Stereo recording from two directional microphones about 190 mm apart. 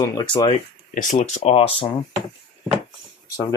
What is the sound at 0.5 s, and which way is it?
Speech, 40° left (ahead or behind).